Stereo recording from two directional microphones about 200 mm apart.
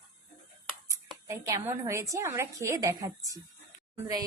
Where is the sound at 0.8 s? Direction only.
15° right (ahead or behind).